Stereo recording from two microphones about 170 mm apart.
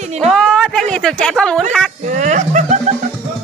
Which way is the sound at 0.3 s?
Centre (ahead or behind).